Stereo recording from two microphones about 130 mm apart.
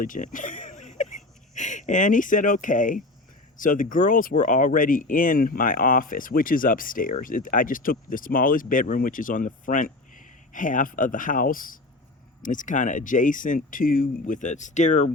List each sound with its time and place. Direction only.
0.0 s speech: 90° left; by 15.1 s 65° left (ahead or behind)